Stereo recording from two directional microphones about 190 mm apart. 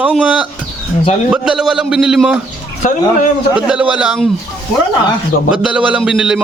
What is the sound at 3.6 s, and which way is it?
Speech, 5° right (ahead or behind).